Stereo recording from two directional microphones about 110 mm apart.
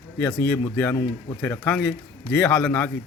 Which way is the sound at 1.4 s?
15° left (ahead or behind).